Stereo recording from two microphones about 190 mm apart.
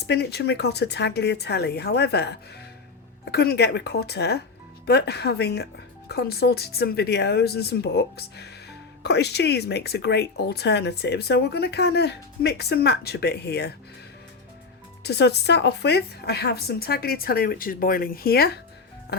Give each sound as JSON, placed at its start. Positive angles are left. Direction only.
{"t": 0.1, "sound": "speech", "side_deg": 60}
{"t": 3.3, "sound": "speech", "side_deg": 55}
{"t": 15.0, "sound": "speech", "side_deg": 60}